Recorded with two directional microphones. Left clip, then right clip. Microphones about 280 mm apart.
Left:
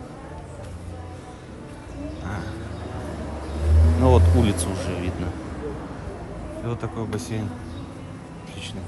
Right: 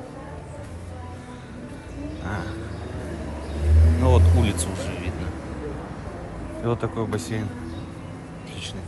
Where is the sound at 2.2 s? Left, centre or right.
Centre.